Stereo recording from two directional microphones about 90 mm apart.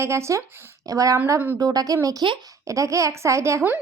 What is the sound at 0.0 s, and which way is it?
A woman's voice, 30° right (ahead or behind).